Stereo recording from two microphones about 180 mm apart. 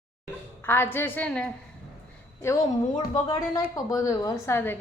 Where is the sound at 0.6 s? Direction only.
10° left (ahead or behind).